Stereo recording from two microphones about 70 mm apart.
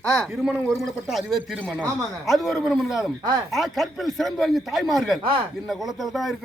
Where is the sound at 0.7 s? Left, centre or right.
Centre.